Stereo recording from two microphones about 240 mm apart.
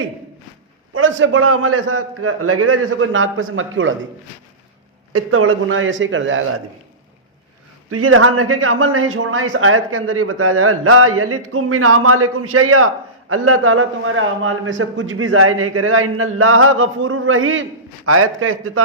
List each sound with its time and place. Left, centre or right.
0.9 s a man's voice: right
5.1 s a man's voice: right
7.9 s a man's voice: right